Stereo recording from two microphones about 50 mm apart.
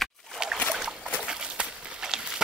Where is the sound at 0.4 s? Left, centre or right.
Centre.